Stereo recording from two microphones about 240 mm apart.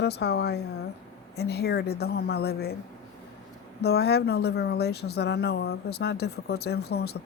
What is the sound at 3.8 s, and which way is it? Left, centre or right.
Speech, left.